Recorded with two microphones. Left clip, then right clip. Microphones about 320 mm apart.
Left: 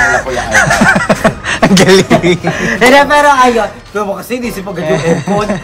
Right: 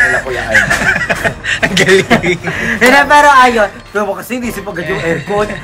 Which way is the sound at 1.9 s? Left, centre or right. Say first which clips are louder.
Left 2 dB; centre.